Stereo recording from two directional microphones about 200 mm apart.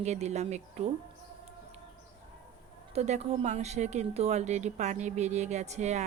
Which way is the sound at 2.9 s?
35° right (ahead or behind).